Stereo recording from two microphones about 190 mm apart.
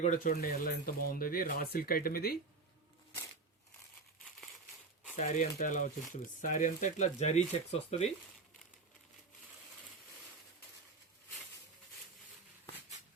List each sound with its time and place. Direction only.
0.0 s speech: 45° left (ahead or behind)
5.1 s speech: 40° left (ahead or behind)